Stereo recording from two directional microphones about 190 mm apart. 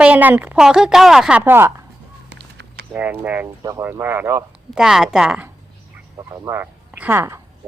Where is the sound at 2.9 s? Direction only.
10° right (ahead or behind).